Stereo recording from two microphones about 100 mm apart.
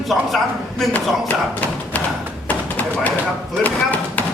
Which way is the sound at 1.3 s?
15° left (ahead or behind).